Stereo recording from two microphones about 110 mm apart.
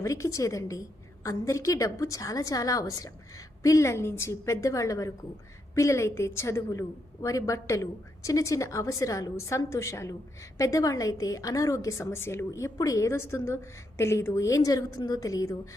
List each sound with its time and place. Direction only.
0.0 s a woman's voice: 30° left (ahead or behind)